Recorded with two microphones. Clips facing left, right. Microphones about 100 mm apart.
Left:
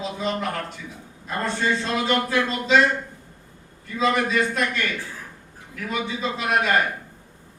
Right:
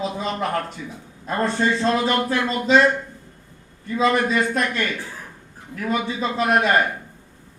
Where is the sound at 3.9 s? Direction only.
35° right (ahead or behind).